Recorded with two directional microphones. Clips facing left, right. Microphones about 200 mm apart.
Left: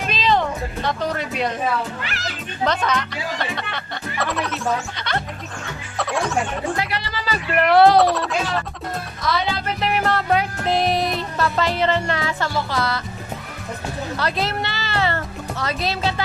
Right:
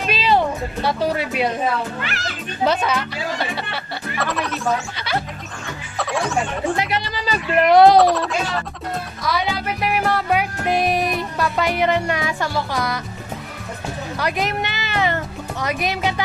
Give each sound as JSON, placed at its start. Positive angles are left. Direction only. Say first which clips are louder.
{"t": 0.0, "sound": "speech", "louder": "right 2 dB", "side_deg": -10}
{"t": 2.6, "sound": "speech", "louder": "right 2 dB", "side_deg": -10}
{"t": 5.9, "sound": "music", "louder": "even", "side_deg": 0}
{"t": 6.8, "sound": "music", "louder": "right 3 dB", "side_deg": -20}
{"t": 8.0, "sound": "speech", "louder": "right 2 dB", "side_deg": 0}
{"t": 9.2, "sound": "music", "louder": "even", "side_deg": -10}
{"t": 14.1, "sound": "speech", "louder": "right 2 dB", "side_deg": -15}